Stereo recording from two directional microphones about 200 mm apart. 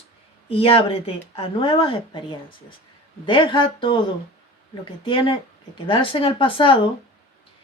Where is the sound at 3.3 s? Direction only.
25° left (ahead or behind).